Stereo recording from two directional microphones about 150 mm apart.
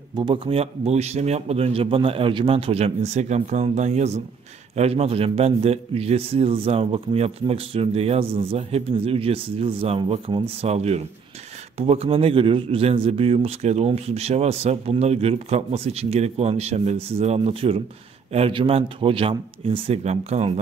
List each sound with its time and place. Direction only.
0.1 s a man's voice: 35° right (ahead or behind)